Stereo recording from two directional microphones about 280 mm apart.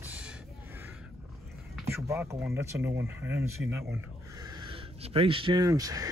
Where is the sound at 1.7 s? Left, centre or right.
Centre.